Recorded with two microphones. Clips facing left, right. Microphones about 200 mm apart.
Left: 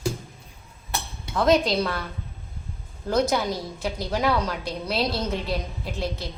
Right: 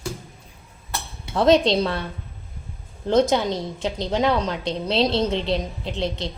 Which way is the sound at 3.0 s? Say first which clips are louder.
Right 4 dB; 25° right (ahead or behind).